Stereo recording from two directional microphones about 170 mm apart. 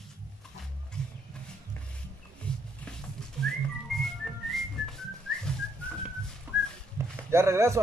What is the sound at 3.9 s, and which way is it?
Whistling, centre (ahead or behind).